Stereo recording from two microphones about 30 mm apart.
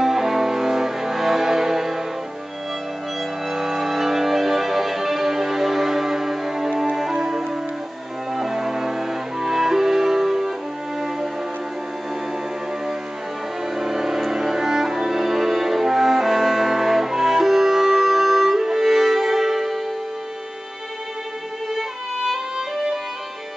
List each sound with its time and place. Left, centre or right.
0.0 s music: centre
3.4 s music: centre
13.7 s music: centre
21.7 s violin: centre